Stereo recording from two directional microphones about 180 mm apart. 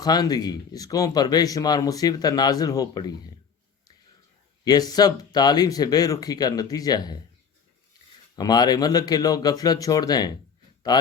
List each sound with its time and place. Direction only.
0.0 s a man's voice: 20° left (ahead or behind)
4.6 s a man's voice: 20° left (ahead or behind)
8.4 s a man's voice: 20° left (ahead or behind)